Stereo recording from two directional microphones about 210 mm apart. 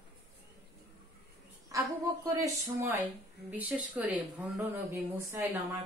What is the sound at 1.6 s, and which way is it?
A woman's voice, 15° right (ahead or behind).